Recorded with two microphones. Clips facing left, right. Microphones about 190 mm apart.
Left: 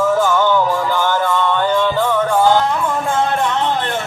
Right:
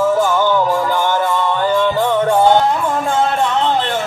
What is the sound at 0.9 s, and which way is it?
Music, 15° right (ahead or behind).